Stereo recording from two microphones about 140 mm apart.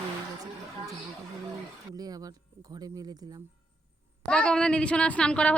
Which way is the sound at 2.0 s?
25° right (ahead or behind).